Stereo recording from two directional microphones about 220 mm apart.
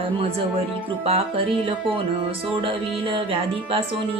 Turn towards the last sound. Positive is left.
turn(degrees=-25)  # may be behind; listen again after turning